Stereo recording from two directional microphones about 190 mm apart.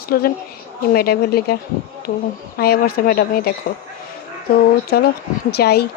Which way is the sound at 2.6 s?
55° left (ahead or behind).